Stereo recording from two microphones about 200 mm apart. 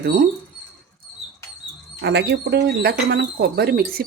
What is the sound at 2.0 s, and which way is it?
Speech, 60° right (ahead or behind).